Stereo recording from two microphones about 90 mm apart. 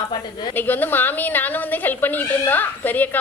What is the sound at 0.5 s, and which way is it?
Speech, 20° left (ahead or behind).